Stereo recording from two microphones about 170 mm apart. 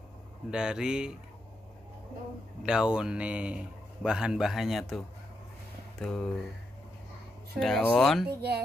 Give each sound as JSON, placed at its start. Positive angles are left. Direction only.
{"t": 0.5, "sound": "a man's voice", "side_deg": -5}
{"t": 2.6, "sound": "a man's voice", "side_deg": -5}
{"t": 7.5, "sound": "a man's voice", "side_deg": 5}
{"t": 8.3, "sound": "speech", "side_deg": -70}